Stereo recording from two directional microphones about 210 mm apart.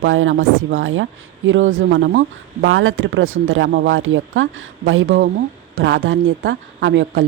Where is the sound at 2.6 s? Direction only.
70° right (ahead or behind).